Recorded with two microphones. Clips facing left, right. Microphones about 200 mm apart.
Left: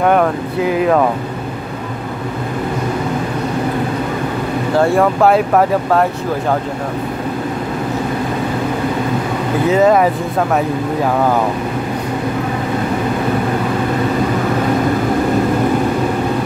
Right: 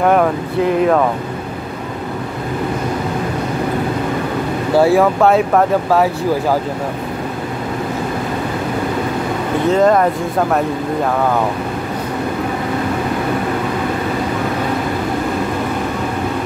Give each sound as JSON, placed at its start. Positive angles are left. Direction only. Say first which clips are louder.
{"t": 0.0, "sound": "speech", "louder": "even", "side_deg": 0}
{"t": 4.7, "sound": "speech", "louder": "right 2 dB", "side_deg": -5}
{"t": 9.7, "sound": "speech", "louder": "left 1 dB", "side_deg": 5}